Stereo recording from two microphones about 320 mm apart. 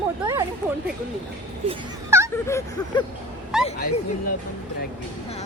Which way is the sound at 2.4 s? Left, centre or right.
Centre.